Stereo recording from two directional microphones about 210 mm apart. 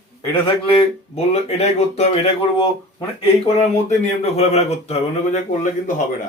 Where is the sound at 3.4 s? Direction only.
30° left (ahead or behind).